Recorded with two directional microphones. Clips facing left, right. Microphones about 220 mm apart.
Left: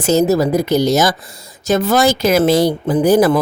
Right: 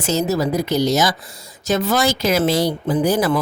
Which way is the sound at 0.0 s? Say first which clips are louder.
Left 6 dB; 50° left (ahead or behind).